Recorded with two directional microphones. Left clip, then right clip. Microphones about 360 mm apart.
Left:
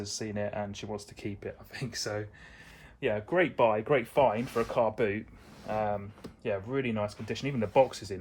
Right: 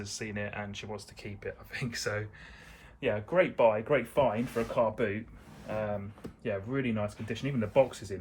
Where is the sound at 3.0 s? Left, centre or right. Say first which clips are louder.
Even; left.